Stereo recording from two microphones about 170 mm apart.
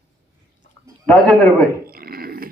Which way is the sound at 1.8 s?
60° right (ahead or behind).